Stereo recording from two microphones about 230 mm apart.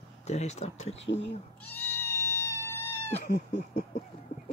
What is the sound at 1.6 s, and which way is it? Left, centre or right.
Cat, centre.